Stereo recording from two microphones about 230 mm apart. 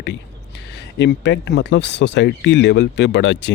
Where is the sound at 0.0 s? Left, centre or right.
Left.